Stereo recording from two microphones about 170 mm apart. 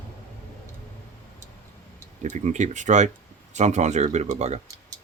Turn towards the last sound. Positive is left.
turn(degrees=-40)  # may be behind; listen again after turning